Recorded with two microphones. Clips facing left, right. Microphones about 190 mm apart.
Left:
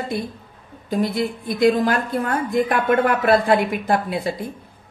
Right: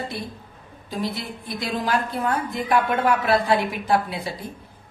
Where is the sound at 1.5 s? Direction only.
50° left (ahead or behind).